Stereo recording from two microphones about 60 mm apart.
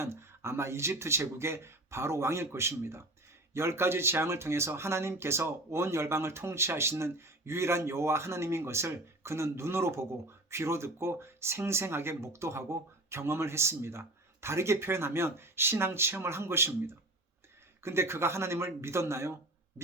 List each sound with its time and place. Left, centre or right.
0.0 s speech: right